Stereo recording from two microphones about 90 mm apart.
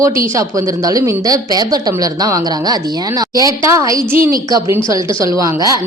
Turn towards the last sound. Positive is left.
turn(degrees=-40)  # may be behind; listen again after turning